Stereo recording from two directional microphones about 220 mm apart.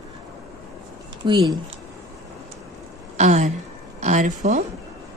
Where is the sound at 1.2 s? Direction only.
20° right (ahead or behind).